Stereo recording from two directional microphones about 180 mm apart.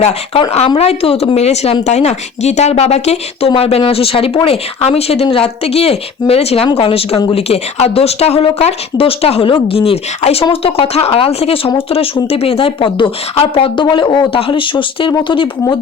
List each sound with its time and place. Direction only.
0.0 s speech: 35° left (ahead or behind)